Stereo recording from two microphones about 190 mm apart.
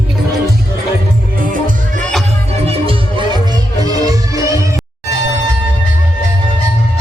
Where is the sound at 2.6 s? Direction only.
30° right (ahead or behind).